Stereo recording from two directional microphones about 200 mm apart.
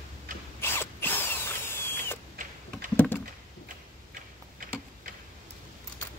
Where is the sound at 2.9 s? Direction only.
10° left (ahead or behind).